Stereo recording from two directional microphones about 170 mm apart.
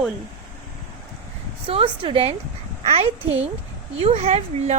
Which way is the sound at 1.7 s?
30° right (ahead or behind).